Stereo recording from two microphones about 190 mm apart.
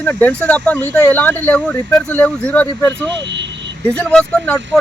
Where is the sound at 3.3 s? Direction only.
70° right (ahead or behind).